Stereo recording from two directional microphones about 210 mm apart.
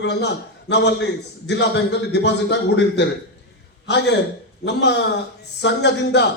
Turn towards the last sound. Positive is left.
turn(degrees=55)  # may be behind; listen again after turning